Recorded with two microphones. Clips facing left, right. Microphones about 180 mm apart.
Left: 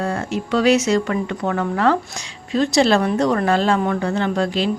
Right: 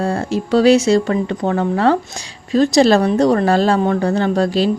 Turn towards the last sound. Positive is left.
turn(degrees=-40)  # may be behind; listen again after turning